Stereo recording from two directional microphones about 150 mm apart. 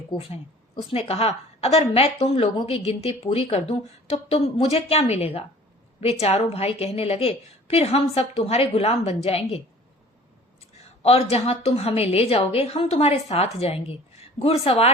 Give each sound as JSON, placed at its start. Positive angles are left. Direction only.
{"t": 0.1, "sound": "a woman's voice", "side_deg": 40}
{"t": 11.0, "sound": "a woman's voice", "side_deg": 45}